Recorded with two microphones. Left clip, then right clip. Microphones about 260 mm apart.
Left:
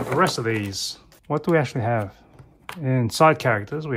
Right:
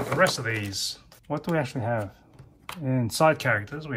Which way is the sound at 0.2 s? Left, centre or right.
Centre.